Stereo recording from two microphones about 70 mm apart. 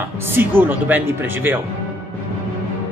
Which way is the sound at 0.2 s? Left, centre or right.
Right.